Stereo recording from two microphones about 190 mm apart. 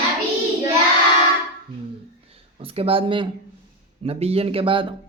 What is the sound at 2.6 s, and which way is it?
Speech, 30° right (ahead or behind).